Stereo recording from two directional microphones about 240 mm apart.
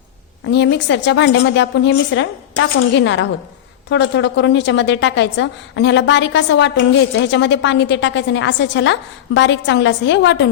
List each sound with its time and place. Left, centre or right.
0.5 s a woman's voice: left